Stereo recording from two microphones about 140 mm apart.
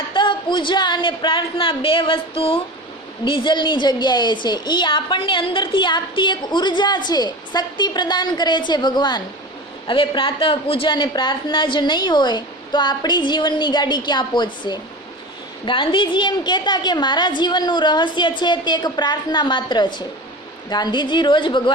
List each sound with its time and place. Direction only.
0.1 s a woman's voice: 35° left (ahead or behind)